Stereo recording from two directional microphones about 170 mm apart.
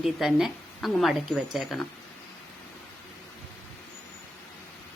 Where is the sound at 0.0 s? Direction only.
Centre (ahead or behind).